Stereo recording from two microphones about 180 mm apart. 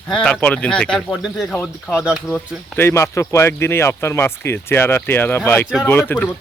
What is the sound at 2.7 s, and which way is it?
Speech, 15° left (ahead or behind).